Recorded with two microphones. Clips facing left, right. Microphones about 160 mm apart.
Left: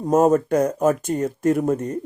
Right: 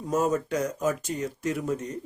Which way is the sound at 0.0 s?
50° left (ahead or behind).